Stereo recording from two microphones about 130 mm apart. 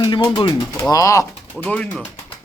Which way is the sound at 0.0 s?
35° left (ahead or behind).